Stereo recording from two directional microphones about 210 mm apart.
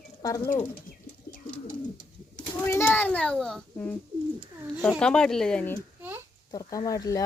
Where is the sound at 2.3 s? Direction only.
10° left (ahead or behind).